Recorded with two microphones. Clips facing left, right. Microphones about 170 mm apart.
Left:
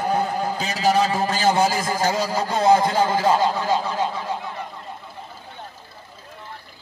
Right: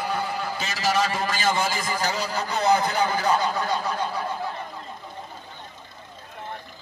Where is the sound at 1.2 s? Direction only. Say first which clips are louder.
Left 6 dB; 30° left (ahead or behind).